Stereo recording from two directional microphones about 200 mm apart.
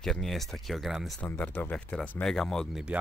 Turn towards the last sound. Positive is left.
turn(degrees=-5)  # may be behind; listen again after turning